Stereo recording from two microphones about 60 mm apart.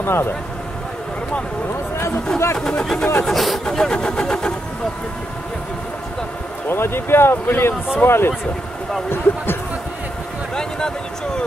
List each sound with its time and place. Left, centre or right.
0.0 s speech: left
2.5 s speech: centre
3.3 s speech: centre
6.7 s speech: left
10.5 s a sound: centre